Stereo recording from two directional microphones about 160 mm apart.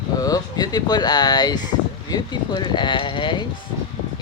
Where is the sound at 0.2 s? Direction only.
25° left (ahead or behind).